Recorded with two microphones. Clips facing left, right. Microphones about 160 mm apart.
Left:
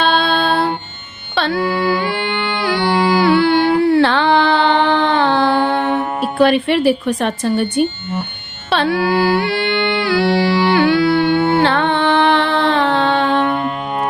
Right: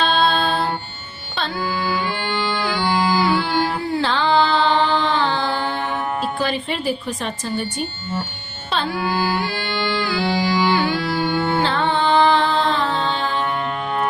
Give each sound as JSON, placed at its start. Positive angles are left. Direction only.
{"t": 0.0, "sound": "music", "side_deg": 65}
{"t": 2.8, "sound": "a sound", "side_deg": 65}
{"t": 6.4, "sound": "a woman's voice", "side_deg": 70}
{"t": 8.7, "sound": "music", "side_deg": 70}